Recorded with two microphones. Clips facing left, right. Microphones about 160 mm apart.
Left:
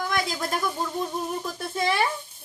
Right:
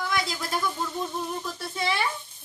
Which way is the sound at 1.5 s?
45° left (ahead or behind).